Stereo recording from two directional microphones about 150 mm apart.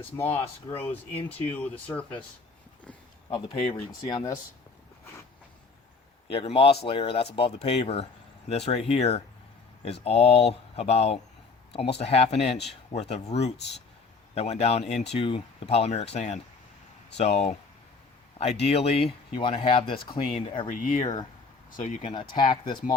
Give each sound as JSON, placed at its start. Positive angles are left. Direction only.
{"t": 0.2, "sound": "speech", "side_deg": 15}
{"t": 3.2, "sound": "speech", "side_deg": 35}
{"t": 4.0, "sound": "speech", "side_deg": 20}
{"t": 6.3, "sound": "speech", "side_deg": 40}
{"t": 18.6, "sound": "speech", "side_deg": 45}
{"t": 20.7, "sound": "speech", "side_deg": 55}
{"t": 22.0, "sound": "speech", "side_deg": 30}